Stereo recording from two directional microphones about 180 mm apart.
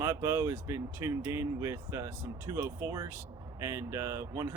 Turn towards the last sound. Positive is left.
turn(degrees=-15)  # may be behind; listen again after turning